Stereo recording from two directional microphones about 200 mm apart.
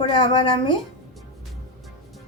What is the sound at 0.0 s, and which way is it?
Speech, 25° left (ahead or behind).